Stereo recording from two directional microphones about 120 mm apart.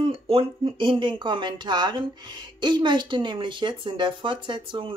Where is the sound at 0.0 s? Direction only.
50° right (ahead or behind).